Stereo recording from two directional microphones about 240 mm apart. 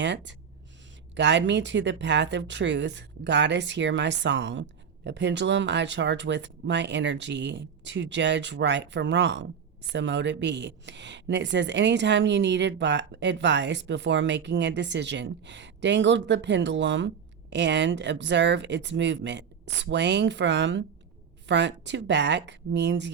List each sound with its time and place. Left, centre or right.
0.0 s speech: right